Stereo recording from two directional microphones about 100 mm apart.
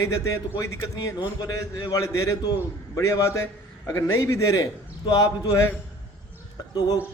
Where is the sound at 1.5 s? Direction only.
40° left (ahead or behind).